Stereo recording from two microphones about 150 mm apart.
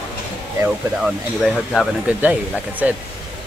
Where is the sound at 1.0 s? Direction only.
Centre (ahead or behind).